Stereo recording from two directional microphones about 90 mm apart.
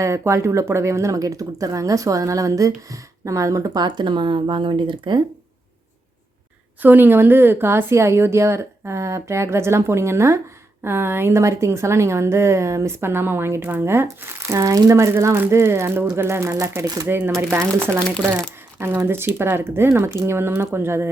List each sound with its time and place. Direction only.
0.0 s speech: 35° right (ahead or behind); by 5.2 s 60° right (ahead or behind)
6.8 s a woman's voice: 20° right (ahead or behind); by 17.1 s 45° right (ahead or behind)
17.1 s a woman's voice: 25° right (ahead or behind)